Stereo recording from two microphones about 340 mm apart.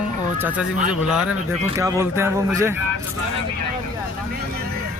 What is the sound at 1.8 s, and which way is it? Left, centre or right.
Speech, centre.